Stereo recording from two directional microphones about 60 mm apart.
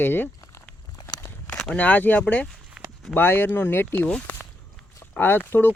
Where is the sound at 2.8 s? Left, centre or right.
Centre.